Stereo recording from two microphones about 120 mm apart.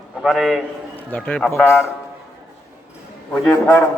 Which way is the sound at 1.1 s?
15° left (ahead or behind).